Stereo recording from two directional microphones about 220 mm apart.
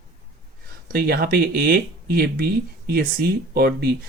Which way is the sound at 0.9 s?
45° right (ahead or behind).